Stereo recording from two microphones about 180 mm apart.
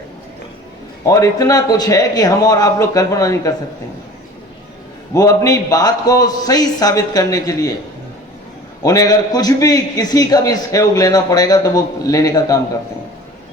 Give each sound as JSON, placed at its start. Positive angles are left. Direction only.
{"t": 1.0, "sound": "a man's voice", "side_deg": 20}
{"t": 5.1, "sound": "a man's voice", "side_deg": 20}
{"t": 8.8, "sound": "a man's voice", "side_deg": 20}